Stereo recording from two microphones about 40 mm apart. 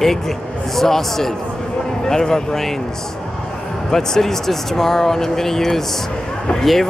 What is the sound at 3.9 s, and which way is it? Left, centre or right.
Speech, centre.